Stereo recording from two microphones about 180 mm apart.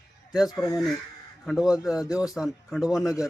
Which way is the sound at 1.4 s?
Centre (ahead or behind).